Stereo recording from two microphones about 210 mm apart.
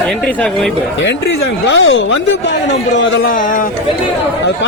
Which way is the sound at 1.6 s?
65° left (ahead or behind).